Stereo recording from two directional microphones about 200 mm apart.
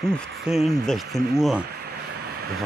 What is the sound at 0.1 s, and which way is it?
Speech, centre (ahead or behind).